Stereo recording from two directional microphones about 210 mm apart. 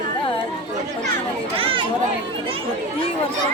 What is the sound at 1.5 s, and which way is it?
Speech, 25° right (ahead or behind).